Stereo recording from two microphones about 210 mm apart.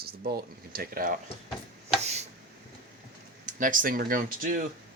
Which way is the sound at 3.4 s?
40° right (ahead or behind).